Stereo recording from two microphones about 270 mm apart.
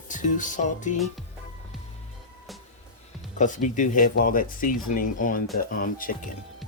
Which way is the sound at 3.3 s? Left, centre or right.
Left.